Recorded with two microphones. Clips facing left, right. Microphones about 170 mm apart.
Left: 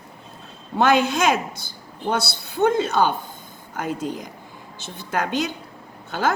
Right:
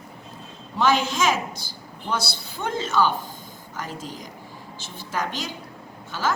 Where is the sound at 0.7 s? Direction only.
60° left (ahead or behind).